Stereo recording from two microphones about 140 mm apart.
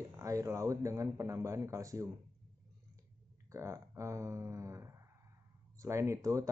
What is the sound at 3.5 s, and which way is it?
Speech, 20° right (ahead or behind).